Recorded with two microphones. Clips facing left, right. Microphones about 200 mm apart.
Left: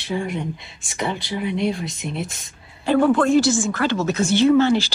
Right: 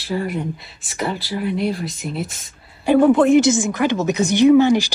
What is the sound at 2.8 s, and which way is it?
A woman's voice, 15° right (ahead or behind).